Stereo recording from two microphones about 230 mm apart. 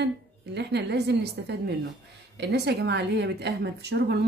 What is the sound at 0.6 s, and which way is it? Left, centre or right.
A woman's voice, right.